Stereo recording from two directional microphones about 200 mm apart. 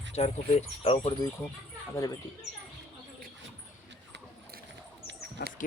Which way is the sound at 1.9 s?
15° left (ahead or behind).